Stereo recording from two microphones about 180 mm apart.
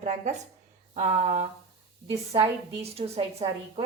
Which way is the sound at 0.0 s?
40° right (ahead or behind).